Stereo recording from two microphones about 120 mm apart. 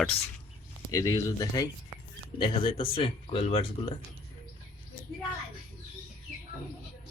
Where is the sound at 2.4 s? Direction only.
45° left (ahead or behind).